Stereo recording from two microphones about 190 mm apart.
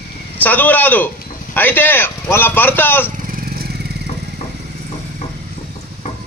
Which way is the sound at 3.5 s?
55° right (ahead or behind).